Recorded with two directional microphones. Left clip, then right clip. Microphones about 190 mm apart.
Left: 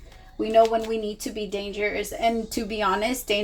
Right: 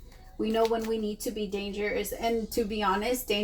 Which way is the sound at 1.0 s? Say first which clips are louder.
Left 2 dB; 45° left (ahead or behind).